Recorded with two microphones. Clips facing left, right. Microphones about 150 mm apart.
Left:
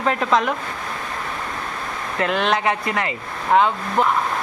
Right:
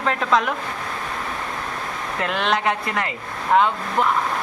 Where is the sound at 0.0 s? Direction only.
5° left (ahead or behind).